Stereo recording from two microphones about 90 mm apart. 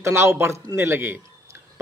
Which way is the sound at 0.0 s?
30° right (ahead or behind).